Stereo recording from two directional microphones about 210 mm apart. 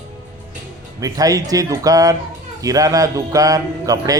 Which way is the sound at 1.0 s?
15° right (ahead or behind).